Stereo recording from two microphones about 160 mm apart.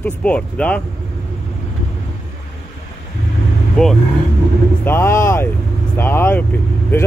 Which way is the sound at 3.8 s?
5° left (ahead or behind).